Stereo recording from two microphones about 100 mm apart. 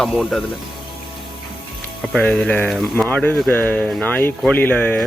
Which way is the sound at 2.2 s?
10° left (ahead or behind).